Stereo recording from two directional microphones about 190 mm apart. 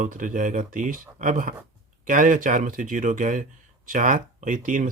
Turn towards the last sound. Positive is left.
turn(degrees=-45)  # may be behind; listen again after turning